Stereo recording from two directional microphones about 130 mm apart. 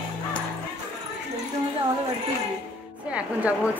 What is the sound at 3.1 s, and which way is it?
Speech, 10° right (ahead or behind).